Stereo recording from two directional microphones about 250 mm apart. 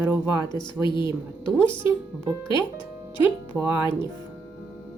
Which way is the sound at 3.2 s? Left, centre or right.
Centre.